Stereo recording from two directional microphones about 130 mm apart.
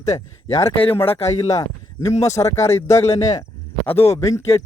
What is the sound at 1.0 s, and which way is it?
Speech, 50° left (ahead or behind).